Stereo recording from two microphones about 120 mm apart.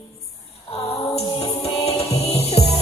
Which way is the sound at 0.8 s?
55° left (ahead or behind).